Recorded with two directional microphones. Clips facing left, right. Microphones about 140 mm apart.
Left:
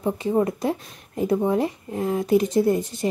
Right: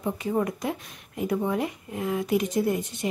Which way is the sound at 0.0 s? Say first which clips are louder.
Left 5 dB; 25° left (ahead or behind).